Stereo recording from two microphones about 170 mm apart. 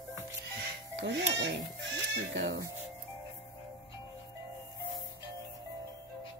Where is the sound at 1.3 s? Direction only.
90° right.